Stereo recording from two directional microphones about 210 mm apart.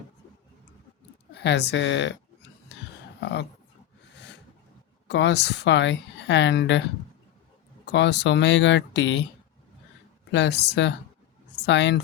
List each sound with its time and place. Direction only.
1.3 s speech: 55° left (ahead or behind)
3.2 s speech: 55° left (ahead or behind)
4.1 s a sound: 55° left (ahead or behind)
5.0 s speech: 55° left (ahead or behind)
7.9 s speech: 55° left (ahead or behind)
10.3 s speech: 55° left (ahead or behind)